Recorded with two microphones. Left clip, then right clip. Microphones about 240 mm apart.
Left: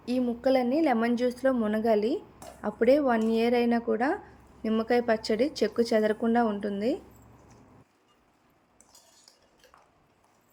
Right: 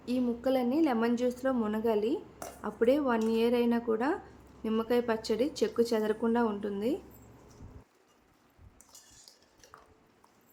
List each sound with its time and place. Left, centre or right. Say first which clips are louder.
0.0 s speech: left 4 dB; centre